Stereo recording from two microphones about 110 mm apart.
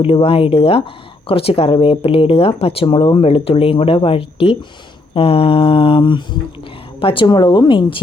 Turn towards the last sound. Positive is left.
turn(degrees=50)  # may be behind; listen again after turning